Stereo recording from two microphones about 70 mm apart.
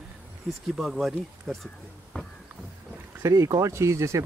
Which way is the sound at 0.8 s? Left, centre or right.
Centre.